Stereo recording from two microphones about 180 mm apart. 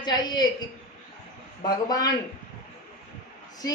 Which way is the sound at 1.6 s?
20° left (ahead or behind).